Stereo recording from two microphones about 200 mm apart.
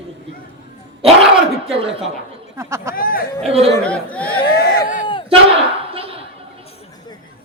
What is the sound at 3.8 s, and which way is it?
Speech, 5° left (ahead or behind).